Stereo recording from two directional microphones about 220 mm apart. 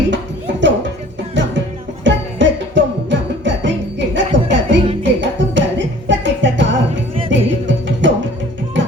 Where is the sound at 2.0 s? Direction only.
55° right (ahead or behind).